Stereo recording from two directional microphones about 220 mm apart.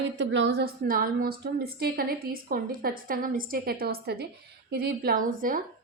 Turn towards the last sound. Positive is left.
turn(degrees=-40)  # may be behind; listen again after turning